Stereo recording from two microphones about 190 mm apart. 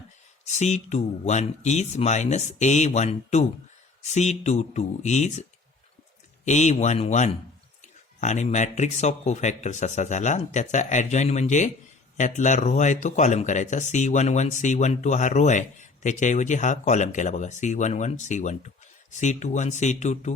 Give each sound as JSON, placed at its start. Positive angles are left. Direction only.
{"t": 0.4, "sound": "speech", "side_deg": 35}